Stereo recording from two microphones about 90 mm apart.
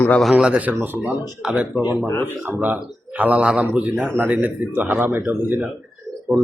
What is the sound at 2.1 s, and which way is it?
Speech, 25° left (ahead or behind).